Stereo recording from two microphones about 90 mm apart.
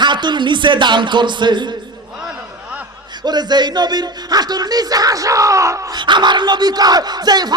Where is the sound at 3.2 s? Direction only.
50° right (ahead or behind); by 5.8 s 35° right (ahead or behind).